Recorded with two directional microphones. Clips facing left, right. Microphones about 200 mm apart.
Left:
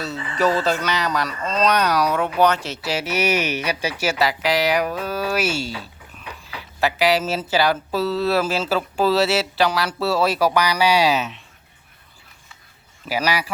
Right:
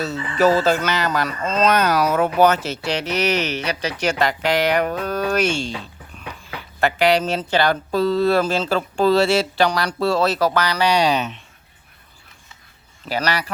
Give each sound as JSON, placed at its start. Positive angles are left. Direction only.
{"t": 0.0, "sound": "speech", "side_deg": 0}
{"t": 13.1, "sound": "speech", "side_deg": 10}